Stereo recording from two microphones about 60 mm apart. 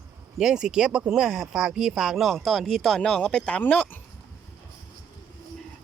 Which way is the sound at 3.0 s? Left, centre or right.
Centre.